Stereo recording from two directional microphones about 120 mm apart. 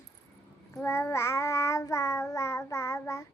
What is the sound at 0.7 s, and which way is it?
Child singing, 20° left (ahead or behind).